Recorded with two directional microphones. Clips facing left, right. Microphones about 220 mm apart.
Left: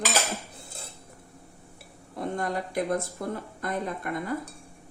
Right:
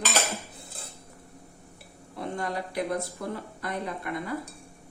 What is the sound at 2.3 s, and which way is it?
Speech, 45° left (ahead or behind).